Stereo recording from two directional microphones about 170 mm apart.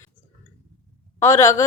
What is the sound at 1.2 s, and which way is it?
Speech, 15° left (ahead or behind).